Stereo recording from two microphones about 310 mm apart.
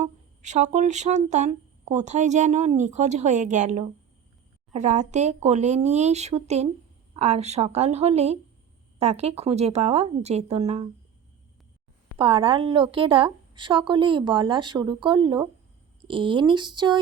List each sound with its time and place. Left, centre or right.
0.0 s speech: right
12.1 s a woman's voice: centre